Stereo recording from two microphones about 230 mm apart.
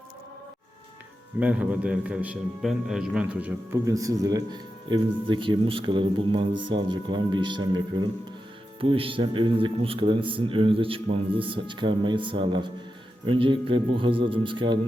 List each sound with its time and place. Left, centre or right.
1.4 s a man's voice: centre